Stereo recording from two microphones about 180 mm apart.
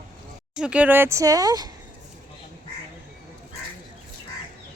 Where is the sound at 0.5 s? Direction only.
5° right (ahead or behind); by 1.7 s 20° right (ahead or behind).